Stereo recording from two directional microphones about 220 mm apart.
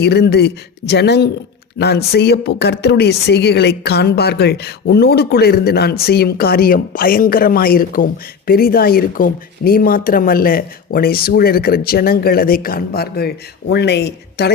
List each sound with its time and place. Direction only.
0.0 s speech: 50° left (ahead or behind)